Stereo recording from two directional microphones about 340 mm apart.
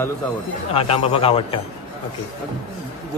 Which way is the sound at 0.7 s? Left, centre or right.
Centre.